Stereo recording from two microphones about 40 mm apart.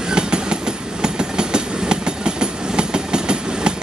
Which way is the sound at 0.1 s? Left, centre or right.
Right.